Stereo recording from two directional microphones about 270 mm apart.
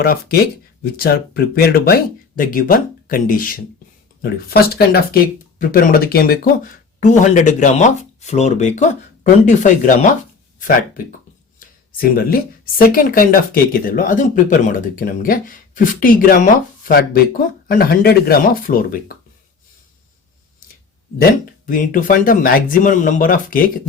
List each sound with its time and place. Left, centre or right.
0.0 s speech: left
11.9 s speech: left
21.7 s speech: left